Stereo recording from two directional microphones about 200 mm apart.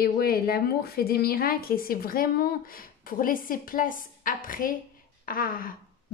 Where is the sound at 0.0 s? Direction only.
50° left (ahead or behind).